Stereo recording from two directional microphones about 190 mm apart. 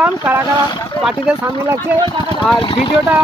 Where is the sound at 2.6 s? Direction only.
25° left (ahead or behind).